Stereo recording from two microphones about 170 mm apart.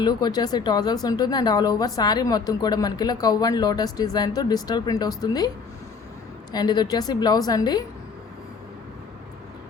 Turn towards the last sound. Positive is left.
turn(degrees=25)  # may be behind; listen again after turning